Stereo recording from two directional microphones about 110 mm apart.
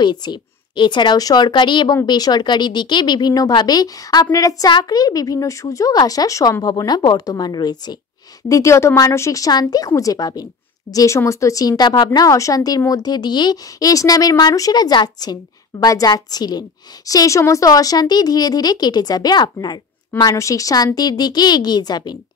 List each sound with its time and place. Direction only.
0.0 s a woman's voice: 40° left (ahead or behind)
8.5 s speech: 30° left (ahead or behind)